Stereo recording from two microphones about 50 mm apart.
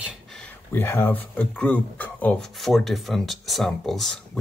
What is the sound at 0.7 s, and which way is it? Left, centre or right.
Speech, left.